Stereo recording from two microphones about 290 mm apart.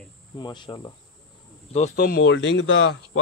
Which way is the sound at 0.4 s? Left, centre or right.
Centre.